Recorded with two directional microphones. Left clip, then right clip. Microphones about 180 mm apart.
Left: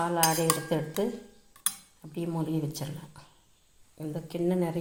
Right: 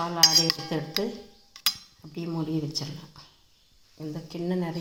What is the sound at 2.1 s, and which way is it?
Speech, 5° right (ahead or behind).